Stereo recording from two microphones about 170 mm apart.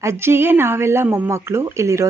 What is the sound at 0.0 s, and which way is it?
Speech, 15° right (ahead or behind).